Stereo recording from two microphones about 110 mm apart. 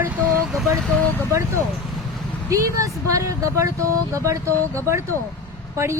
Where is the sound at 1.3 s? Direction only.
25° right (ahead or behind).